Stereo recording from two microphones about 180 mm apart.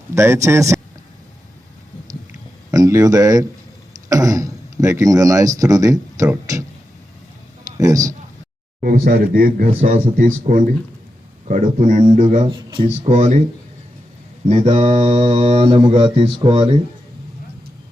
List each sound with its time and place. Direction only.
0.1 s a man's voice: 15° right (ahead or behind)
2.7 s speech: 20° right (ahead or behind)
7.8 s speech: 20° right (ahead or behind)
8.8 s a man's voice: 55° right (ahead or behind)
12.5 s speech: 25° right (ahead or behind)
13.1 s speech: 35° right (ahead or behind)
14.4 s speech: 35° right (ahead or behind)